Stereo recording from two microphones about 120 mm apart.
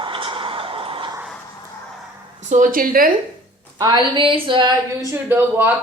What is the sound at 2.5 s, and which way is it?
Speech, 80° right.